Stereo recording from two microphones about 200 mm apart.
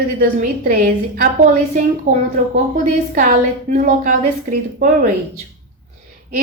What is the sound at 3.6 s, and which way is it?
A woman's voice, 40° right (ahead or behind).